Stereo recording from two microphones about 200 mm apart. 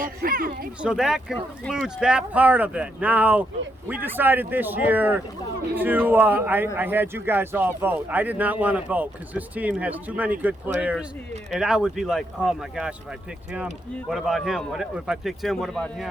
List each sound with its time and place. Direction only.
0.0 s speech: 45° right (ahead or behind)
0.8 s speech: 5° right (ahead or behind)
14.1 s speech: centre (ahead or behind)